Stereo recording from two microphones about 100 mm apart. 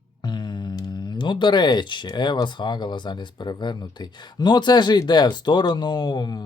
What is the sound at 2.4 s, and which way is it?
Speech, 50° left (ahead or behind).